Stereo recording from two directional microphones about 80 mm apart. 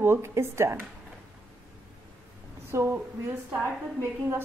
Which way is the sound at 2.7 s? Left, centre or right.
Right.